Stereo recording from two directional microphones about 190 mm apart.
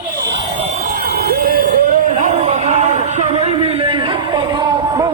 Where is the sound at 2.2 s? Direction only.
35° right (ahead or behind).